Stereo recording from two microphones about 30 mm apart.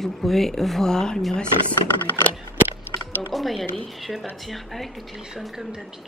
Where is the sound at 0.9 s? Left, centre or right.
Left.